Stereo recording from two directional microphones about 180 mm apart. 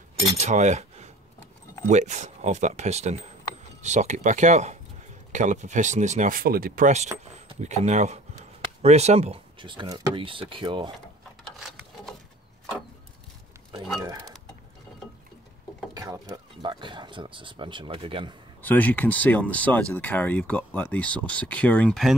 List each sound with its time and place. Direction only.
0.4 s cutlery: 40° right (ahead or behind)
1.9 s speech: 40° right (ahead or behind)
11.6 s a sound: centre (ahead or behind)
14.0 s speech: 25° right (ahead or behind)
15.9 s speech: 20° right (ahead or behind)
18.6 s speech: 10° left (ahead or behind)